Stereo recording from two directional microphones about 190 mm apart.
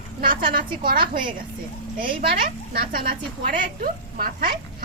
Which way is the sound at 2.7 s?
50° right (ahead or behind).